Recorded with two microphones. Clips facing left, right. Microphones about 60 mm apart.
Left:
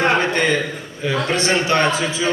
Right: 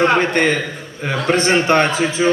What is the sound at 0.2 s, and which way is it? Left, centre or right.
A man's voice, right.